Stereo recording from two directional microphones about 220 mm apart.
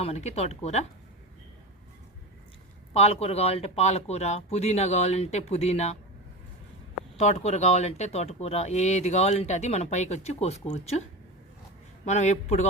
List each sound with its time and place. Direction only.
0.0 s speech: 30° left (ahead or behind)
2.9 s speech: 30° left (ahead or behind)
7.2 s speech: 30° left (ahead or behind)
12.0 s a man's voice: 30° left (ahead or behind)